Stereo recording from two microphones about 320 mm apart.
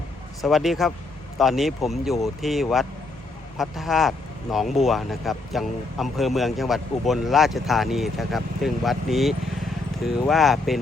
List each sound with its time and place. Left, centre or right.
0.4 s speech: centre